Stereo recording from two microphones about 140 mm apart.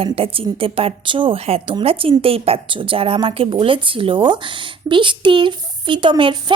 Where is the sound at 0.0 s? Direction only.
40° right (ahead or behind).